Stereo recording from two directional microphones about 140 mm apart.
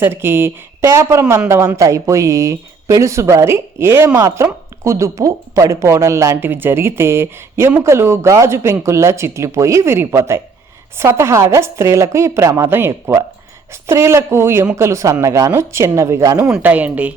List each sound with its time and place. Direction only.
0.0 s speech: 15° right (ahead or behind)
16.4 s speech: 10° right (ahead or behind)